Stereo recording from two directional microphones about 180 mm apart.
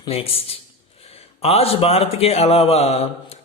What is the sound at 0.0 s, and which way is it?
Speech, 30° left (ahead or behind).